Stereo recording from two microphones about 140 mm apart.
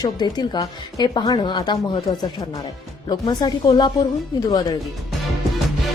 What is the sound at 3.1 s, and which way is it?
Speech, 30° left (ahead or behind).